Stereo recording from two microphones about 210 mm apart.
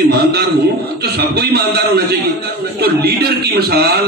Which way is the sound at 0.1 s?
50° right (ahead or behind).